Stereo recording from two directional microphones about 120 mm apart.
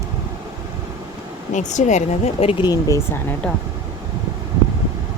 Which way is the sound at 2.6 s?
30° left (ahead or behind).